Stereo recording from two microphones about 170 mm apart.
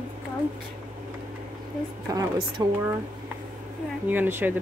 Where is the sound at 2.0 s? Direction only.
25° right (ahead or behind).